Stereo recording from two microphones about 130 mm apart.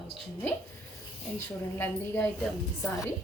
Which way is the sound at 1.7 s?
20° left (ahead or behind).